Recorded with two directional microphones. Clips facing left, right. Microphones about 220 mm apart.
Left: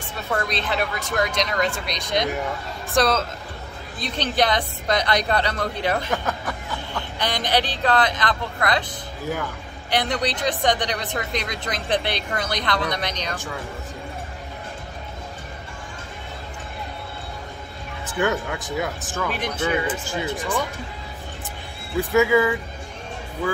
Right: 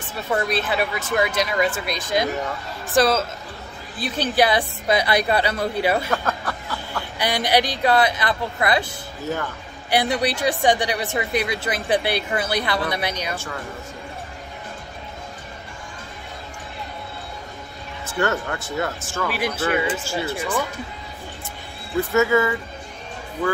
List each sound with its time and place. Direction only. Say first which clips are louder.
0.3 s a woman's voice: right 3 dB; 5° right (ahead or behind)
6.1 s a sound: right 1 dB; 20° left (ahead or behind)
6.9 s a woman's voice: right 3 dB; 10° right (ahead or behind)
18.0 s speech: even; 15° left (ahead or behind)
19.2 s a woman's voice: right 2 dB; 5° right (ahead or behind)
22.1 s speech: left 1 dB; 10° left (ahead or behind)